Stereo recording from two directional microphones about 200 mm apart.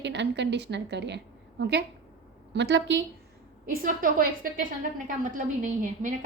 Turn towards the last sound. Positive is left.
turn(degrees=-40)  # may be behind; listen again after turning